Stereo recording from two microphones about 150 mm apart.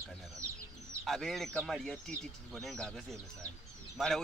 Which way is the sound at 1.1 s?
Centre (ahead or behind).